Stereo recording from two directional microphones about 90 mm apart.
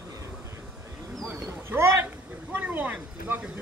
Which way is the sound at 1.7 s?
30° right (ahead or behind).